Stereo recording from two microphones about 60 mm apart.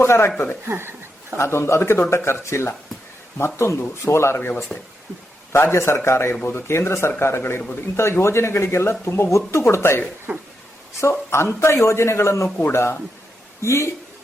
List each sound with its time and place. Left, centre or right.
0.0 s speech: left
0.7 s chuckle: right
1.4 s speech: left
4.4 s speech: left
10.3 s a sound: right
11.0 s speech: left